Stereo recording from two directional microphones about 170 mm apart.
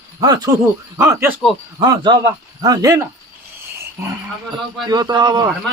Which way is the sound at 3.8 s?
15° right (ahead or behind).